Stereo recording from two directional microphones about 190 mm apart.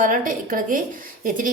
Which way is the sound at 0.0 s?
45° right (ahead or behind).